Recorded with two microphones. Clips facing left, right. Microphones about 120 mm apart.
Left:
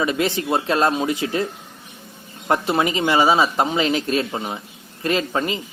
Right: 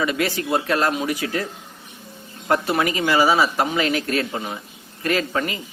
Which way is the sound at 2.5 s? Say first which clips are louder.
Left 1 dB; 20° left (ahead or behind).